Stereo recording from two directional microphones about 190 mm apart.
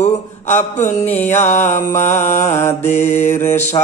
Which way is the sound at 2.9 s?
35° left (ahead or behind).